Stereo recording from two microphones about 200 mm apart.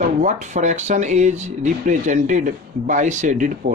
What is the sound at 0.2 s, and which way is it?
Speech, 35° right (ahead or behind).